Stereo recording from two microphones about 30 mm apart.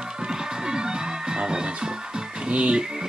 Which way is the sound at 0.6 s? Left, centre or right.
Right.